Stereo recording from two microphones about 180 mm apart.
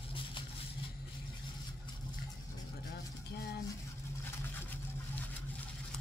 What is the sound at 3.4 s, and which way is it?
Stir, 60° left (ahead or behind).